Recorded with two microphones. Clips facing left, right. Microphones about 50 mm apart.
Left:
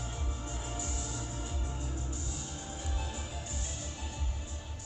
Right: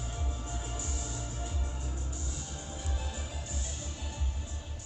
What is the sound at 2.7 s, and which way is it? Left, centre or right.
Music, left.